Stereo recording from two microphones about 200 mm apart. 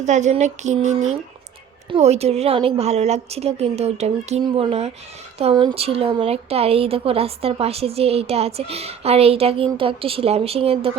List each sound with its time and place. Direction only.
0.0 s a woman's voice: 35° right (ahead or behind)